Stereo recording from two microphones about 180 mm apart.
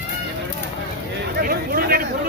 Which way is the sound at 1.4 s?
55° right (ahead or behind).